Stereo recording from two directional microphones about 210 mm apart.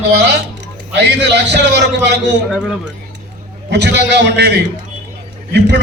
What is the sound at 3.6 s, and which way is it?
Speech, 55° right (ahead or behind).